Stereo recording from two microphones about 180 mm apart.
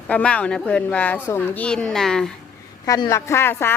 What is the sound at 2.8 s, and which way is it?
Speech, 20° left (ahead or behind).